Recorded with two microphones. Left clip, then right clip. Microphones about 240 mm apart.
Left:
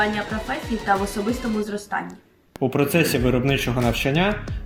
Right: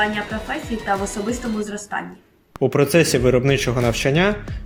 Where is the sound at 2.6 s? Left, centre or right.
Right.